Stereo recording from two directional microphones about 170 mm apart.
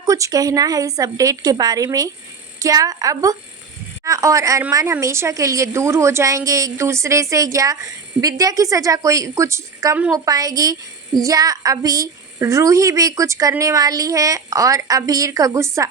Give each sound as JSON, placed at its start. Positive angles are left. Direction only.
{"t": 0.0, "sound": "a woman's voice", "side_deg": -20}